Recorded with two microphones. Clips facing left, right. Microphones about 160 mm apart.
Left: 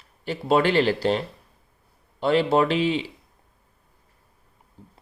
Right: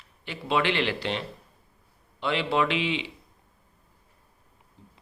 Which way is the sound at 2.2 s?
40° left (ahead or behind).